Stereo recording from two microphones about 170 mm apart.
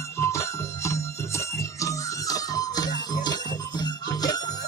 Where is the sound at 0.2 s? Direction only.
15° left (ahead or behind).